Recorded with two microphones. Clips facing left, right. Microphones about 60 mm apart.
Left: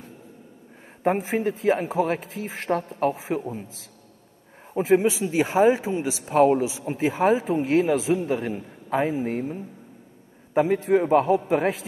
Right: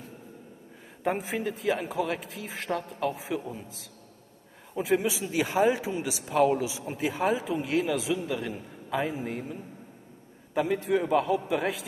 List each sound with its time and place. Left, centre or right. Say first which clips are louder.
1.0 s a man's voice: left 6 dB; left
4.7 s a man's voice: left 7 dB; left
7.0 s a man's voice: left 6 dB; left
10.5 s a man's voice: left 6 dB; left